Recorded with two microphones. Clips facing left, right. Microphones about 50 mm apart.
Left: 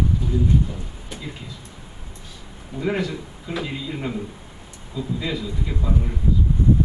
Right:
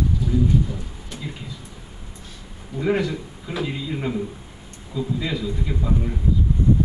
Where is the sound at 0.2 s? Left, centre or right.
Left.